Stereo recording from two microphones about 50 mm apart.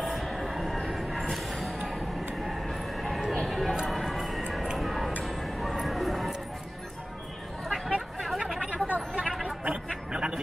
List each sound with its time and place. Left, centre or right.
0.0 s music: centre
2.4 s a sound: centre
3.4 s music: centre
7.6 s chatter: centre
8.8 s chatter: right
9.7 s a sound: centre